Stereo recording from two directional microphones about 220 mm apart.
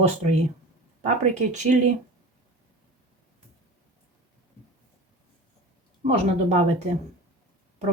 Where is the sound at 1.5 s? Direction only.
35° right (ahead or behind).